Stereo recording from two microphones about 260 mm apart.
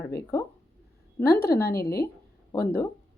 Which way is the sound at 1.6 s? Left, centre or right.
Left.